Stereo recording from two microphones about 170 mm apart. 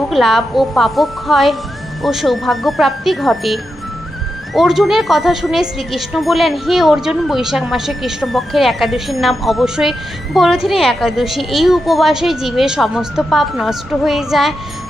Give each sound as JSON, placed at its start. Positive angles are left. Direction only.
{"t": 0.1, "sound": "a woman's voice", "side_deg": 0}